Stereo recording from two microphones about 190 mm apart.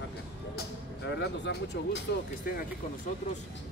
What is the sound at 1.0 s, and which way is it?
Speech, 65° left (ahead or behind).